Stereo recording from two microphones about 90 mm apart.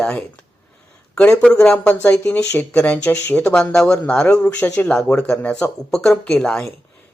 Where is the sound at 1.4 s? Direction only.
10° left (ahead or behind).